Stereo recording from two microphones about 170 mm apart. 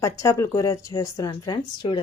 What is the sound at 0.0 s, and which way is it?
A woman's voice, 15° left (ahead or behind).